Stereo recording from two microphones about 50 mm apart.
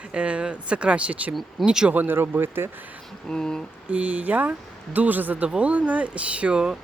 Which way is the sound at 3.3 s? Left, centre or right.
Centre.